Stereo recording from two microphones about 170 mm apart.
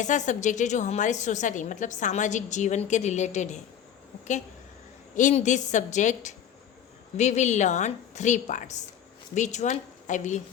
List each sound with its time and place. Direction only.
0.0 s a woman's voice: 45° left (ahead or behind)
5.1 s a woman's voice: 45° left (ahead or behind)